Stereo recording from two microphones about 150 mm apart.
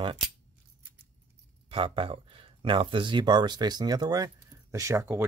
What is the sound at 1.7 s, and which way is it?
Speech, 35° right (ahead or behind).